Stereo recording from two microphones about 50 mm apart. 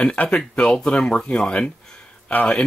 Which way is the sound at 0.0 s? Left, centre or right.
Left.